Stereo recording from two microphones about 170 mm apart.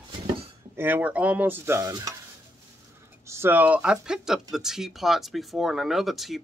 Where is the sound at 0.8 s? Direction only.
10° right (ahead or behind).